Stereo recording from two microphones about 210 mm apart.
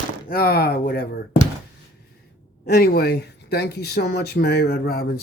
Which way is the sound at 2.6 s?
50° left (ahead or behind).